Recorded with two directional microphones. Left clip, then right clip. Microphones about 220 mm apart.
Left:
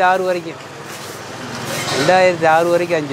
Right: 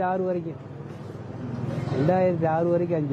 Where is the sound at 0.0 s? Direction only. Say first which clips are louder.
Left 11 dB; 10° left (ahead or behind).